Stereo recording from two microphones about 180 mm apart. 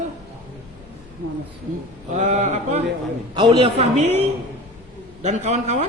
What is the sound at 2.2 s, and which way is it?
A man's voice, 40° right (ahead or behind).